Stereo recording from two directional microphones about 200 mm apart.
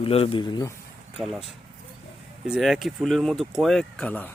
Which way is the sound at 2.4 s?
Centre (ahead or behind).